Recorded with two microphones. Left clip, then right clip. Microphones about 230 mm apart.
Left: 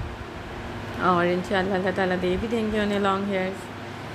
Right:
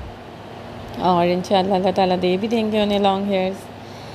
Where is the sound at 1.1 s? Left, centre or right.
Right.